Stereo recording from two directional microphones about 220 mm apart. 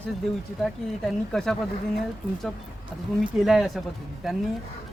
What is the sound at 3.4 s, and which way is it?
Speech, centre (ahead or behind).